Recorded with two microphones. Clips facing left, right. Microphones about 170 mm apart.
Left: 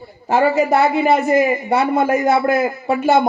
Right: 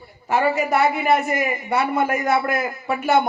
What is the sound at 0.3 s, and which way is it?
A man's voice, 25° left (ahead or behind).